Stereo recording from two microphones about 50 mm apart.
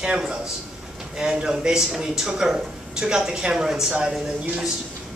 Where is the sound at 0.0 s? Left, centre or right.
Centre.